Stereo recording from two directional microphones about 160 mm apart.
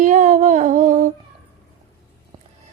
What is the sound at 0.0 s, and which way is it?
Music, 50° right (ahead or behind).